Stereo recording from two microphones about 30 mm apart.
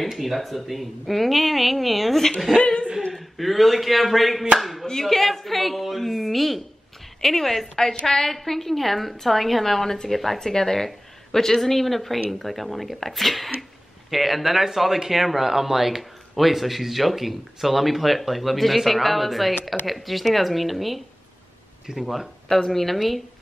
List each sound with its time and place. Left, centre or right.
0.0 s a man's voice: centre
2.6 s speech: left
3.1 s a man's voice: centre
4.8 s a man's voice: centre
7.2 s a woman's voice: centre
10.4 s a woman's voice: centre
22.7 s a man's voice: centre